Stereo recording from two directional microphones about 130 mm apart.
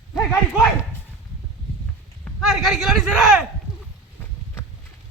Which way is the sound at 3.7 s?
30° left (ahead or behind).